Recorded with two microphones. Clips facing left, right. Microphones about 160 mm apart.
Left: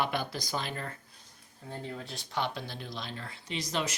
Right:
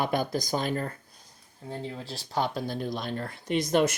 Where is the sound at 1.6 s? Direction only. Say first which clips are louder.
Right 4 dB; 30° right (ahead or behind).